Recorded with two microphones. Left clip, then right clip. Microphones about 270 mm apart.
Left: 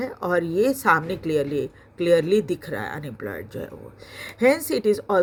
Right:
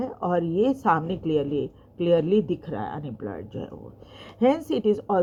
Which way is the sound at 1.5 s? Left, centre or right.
Left.